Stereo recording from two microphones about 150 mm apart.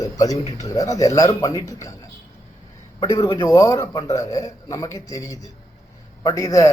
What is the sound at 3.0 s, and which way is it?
Speech, 25° left (ahead or behind).